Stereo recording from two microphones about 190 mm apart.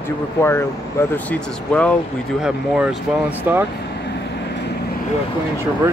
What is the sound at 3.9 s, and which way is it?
Vehicle, 60° left (ahead or behind).